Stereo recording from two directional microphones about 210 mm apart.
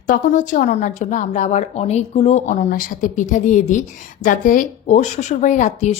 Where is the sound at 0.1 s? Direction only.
35° left (ahead or behind).